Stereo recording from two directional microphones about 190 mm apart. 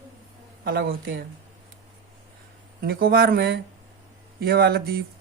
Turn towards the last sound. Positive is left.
turn(degrees=-50)  # may be behind; listen again after turning